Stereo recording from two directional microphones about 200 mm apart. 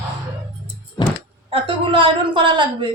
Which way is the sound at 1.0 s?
20° left (ahead or behind).